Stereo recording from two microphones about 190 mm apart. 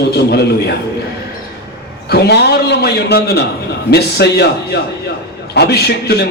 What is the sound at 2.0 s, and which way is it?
A man's voice, 60° left (ahead or behind).